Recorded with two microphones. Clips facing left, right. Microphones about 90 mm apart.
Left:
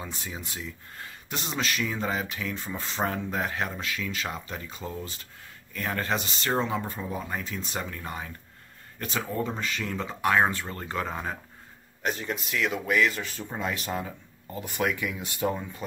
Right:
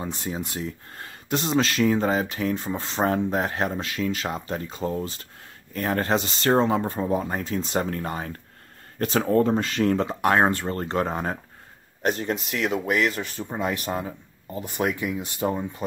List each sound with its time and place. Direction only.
0.0 s speech: 35° right (ahead or behind)
2.7 s speech: 30° right (ahead or behind)
3.1 s speech: 40° right (ahead or behind)
13.2 s speech: 20° right (ahead or behind); by 15.5 s 35° right (ahead or behind)